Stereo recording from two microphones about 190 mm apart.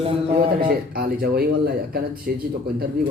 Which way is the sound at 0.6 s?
50° right (ahead or behind).